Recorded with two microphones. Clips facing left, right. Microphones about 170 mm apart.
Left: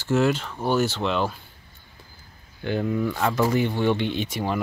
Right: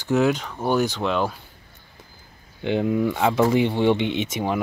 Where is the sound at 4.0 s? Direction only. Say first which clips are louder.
Right 2 dB; 65° right (ahead or behind).